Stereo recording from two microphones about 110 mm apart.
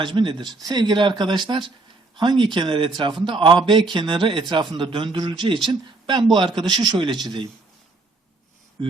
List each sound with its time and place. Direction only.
0.0 s speech: 50° right (ahead or behind)